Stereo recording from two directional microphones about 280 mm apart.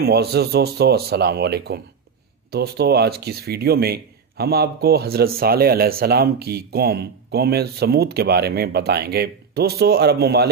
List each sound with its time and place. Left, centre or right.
0.0 s speech: right